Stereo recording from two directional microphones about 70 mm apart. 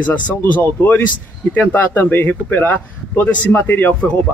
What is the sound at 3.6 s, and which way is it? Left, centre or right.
Speech, left.